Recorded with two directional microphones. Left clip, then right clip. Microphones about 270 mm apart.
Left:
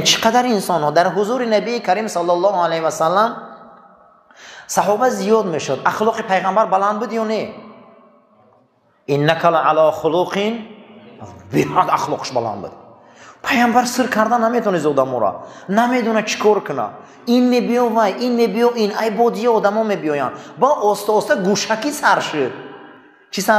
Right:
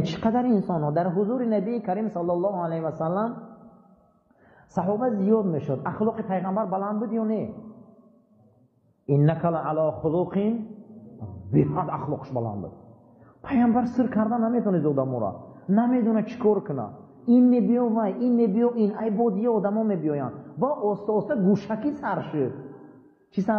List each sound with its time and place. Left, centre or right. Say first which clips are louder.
0.0 s a woman's voice: left 12 dB; centre; by 2.6 s left
2.6 s a woman's voice: left 11 dB; centre
4.7 s a woman's voice: left 10 dB; centre
9.1 s a woman's voice: left 10 dB; centre
9.9 s a man's voice: left 9 dB; left
10.2 s a woman's voice: left 8 dB; centre
20.7 s a man's voice: left 10 dB; left
21.3 s a woman's voice: left 9 dB; centre